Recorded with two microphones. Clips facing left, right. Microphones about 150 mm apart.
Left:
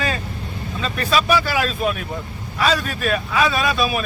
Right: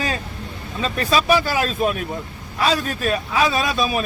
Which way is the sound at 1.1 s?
35° right (ahead or behind).